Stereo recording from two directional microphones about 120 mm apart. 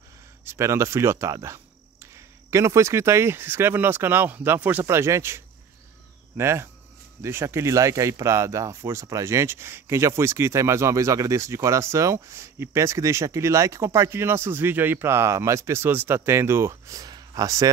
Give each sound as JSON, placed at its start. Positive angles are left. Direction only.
{"t": 0.5, "sound": "speech", "side_deg": -20}